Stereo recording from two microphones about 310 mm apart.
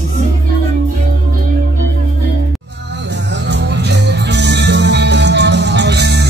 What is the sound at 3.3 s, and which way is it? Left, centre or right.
Music, right.